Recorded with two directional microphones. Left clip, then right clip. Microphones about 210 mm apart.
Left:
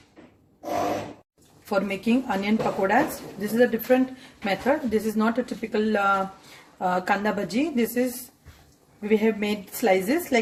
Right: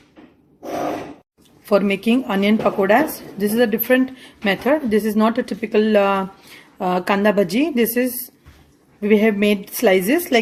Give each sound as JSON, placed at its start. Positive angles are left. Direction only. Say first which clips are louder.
{"t": 1.7, "sound": "speech", "louder": "right 7 dB", "side_deg": -45}